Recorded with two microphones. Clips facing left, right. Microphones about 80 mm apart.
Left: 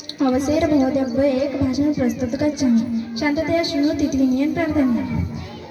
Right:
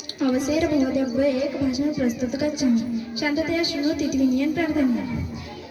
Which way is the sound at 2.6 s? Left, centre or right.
Left.